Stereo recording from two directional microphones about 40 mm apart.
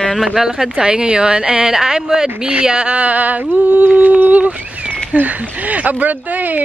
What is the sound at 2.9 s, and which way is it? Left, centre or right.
Speech, right.